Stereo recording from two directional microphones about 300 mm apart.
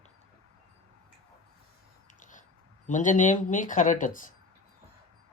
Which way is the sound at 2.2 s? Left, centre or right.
Left.